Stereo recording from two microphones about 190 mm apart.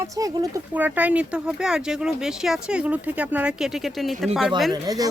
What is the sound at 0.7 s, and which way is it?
Speech, 10° right (ahead or behind).